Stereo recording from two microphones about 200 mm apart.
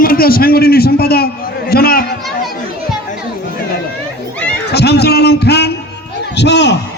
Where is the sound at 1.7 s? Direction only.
50° left (ahead or behind).